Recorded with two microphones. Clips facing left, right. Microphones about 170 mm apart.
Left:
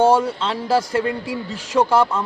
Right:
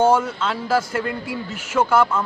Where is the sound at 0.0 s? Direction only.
35° left (ahead or behind).